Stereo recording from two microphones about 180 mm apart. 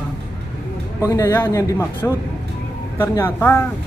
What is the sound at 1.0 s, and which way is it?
Speech, 15° left (ahead or behind).